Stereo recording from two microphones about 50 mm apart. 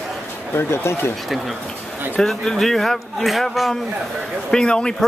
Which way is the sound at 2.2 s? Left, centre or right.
Centre.